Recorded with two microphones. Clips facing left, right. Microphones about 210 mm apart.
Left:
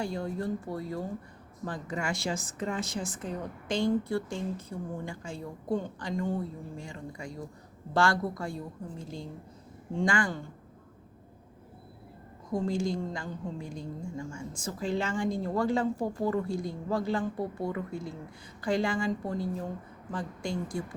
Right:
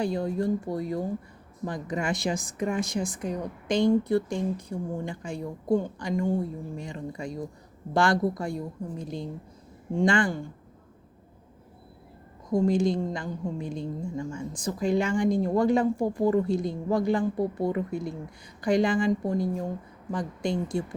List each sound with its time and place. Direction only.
0.0 s a woman's voice: 15° right (ahead or behind)
12.5 s a woman's voice: 15° right (ahead or behind)